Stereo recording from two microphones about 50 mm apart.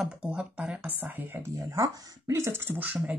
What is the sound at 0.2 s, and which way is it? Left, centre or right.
Speech, right.